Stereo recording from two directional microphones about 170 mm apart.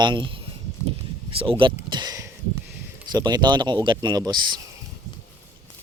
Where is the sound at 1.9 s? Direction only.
20° right (ahead or behind).